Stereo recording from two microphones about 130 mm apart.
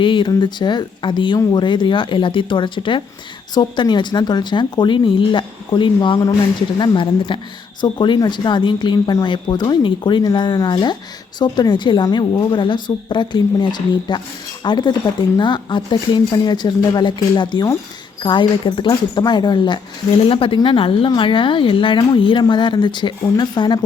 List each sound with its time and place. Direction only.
0.0 s a woman's voice: 40° left (ahead or behind)